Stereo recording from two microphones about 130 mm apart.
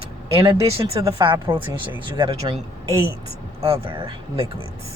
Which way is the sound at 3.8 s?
40° right (ahead or behind).